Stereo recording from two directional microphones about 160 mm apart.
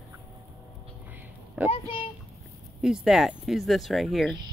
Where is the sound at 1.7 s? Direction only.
35° left (ahead or behind).